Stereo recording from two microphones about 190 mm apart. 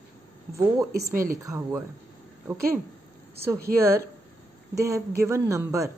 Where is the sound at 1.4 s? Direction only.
15° right (ahead or behind).